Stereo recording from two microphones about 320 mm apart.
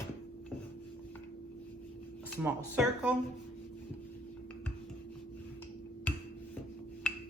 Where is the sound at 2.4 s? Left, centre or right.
Centre.